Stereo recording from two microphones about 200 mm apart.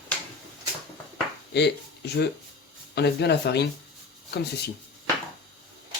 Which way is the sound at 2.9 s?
55° left (ahead or behind).